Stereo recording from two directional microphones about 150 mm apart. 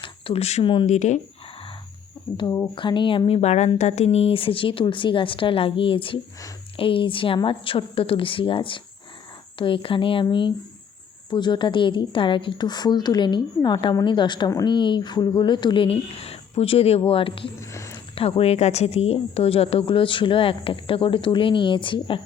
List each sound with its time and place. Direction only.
0.0 s a sound: 40° left (ahead or behind)
0.9 s speech: 50° left (ahead or behind)
2.3 s speech: 20° left (ahead or behind)
2.7 s a woman's voice: 30° left (ahead or behind)
17.6 s a sound: 20° left (ahead or behind)
18.1 s a woman's voice: 40° left (ahead or behind)